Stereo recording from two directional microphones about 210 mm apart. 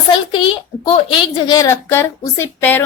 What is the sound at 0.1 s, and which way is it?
A child's voice, 25° left (ahead or behind).